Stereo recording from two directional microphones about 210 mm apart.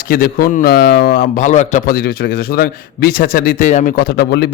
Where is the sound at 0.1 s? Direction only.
45° left (ahead or behind).